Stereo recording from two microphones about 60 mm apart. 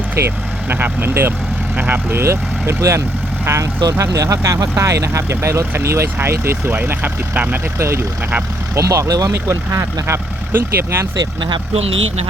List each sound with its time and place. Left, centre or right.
0.7 s speech: right
1.7 s speech: right
2.1 s speech: right
3.8 s speech: right
4.8 s speech: right
6.7 s speech: right
7.8 s speech: right
8.7 s speech: right
9.5 s speech: right